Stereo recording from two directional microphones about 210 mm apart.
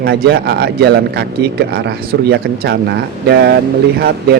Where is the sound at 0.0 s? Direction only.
50° right (ahead or behind).